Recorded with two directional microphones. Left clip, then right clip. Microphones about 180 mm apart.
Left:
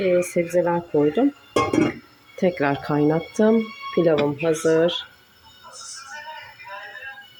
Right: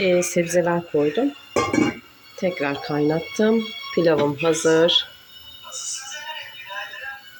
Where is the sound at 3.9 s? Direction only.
5° left (ahead or behind).